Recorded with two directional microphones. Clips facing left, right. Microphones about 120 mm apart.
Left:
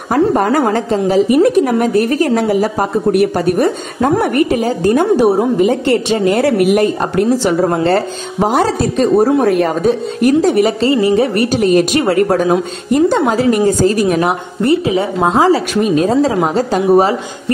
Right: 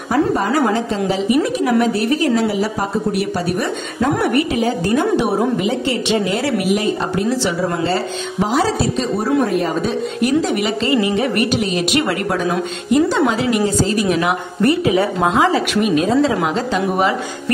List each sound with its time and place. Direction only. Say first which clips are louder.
0.1 s a woman's voice: left 4 dB; 50° left (ahead or behind)
9.5 s a woman's voice: left 6 dB; 65° left (ahead or behind)
9.8 s a woman's voice: left 5 dB; 40° left (ahead or behind)
14.6 s a woman's voice: left 2 dB; 25° left (ahead or behind)